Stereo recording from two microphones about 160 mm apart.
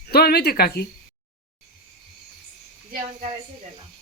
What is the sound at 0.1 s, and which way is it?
Speech, 80° left.